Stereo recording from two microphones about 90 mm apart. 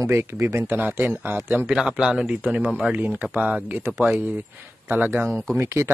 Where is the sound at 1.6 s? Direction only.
10° right (ahead or behind); by 5.9 s 30° right (ahead or behind).